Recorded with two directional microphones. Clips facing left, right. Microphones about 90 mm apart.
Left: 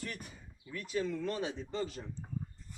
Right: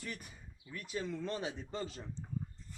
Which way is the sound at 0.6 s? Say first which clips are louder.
Left 5 dB; 15° right (ahead or behind).